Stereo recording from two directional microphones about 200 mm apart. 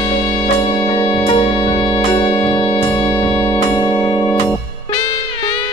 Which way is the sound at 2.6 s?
25° left (ahead or behind).